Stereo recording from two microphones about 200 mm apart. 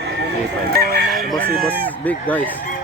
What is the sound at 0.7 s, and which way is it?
Chicken, 50° right (ahead or behind).